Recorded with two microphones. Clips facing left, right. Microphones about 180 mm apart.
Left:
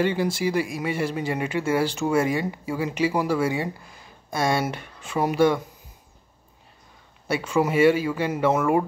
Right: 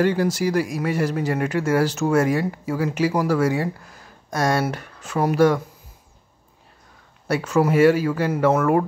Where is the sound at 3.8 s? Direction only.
10° left (ahead or behind).